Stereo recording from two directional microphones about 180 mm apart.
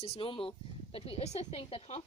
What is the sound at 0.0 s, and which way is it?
Speech, 30° left (ahead or behind).